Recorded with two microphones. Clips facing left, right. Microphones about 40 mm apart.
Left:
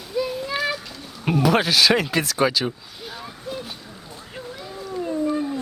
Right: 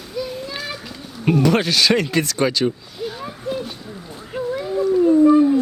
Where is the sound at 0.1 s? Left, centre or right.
Centre.